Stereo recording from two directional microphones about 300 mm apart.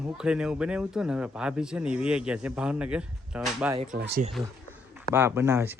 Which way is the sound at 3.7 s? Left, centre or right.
Right.